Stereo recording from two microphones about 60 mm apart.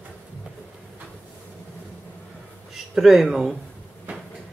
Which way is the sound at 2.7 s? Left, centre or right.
Centre.